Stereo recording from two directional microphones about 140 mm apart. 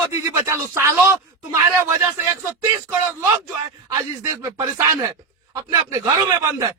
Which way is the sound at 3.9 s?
20° right (ahead or behind).